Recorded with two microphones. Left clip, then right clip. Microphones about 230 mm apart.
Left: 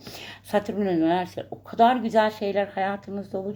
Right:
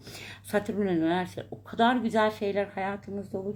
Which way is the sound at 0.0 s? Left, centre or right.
Centre.